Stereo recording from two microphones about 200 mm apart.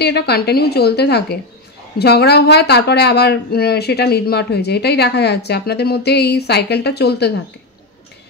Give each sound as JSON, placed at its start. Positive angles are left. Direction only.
{"t": 0.0, "sound": "a woman's voice", "side_deg": 55}